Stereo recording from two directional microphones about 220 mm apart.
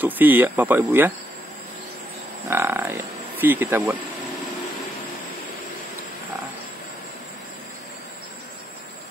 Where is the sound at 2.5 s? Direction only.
10° right (ahead or behind).